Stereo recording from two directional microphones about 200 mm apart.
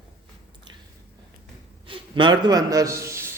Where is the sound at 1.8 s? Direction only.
25° right (ahead or behind).